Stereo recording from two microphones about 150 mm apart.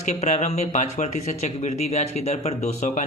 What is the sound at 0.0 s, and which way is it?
A man's voice, 50° left (ahead or behind).